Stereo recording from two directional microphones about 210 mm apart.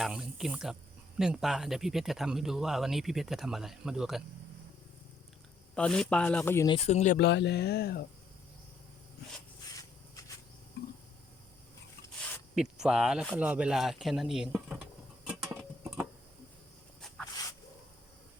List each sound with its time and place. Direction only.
0.0 s speech: centre (ahead or behind)
5.7 s speech: 5° left (ahead or behind)
6.7 s speech: 30° left (ahead or behind)
7.2 s speech: 55° left (ahead or behind)
9.6 s rub: 15° left (ahead or behind)
12.8 s a sound: 5° right (ahead or behind)